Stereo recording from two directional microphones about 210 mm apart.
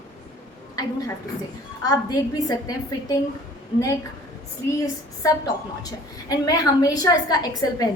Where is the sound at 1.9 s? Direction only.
20° left (ahead or behind).